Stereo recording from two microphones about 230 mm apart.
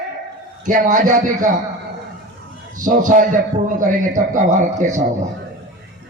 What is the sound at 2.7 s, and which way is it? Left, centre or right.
A man's voice, right.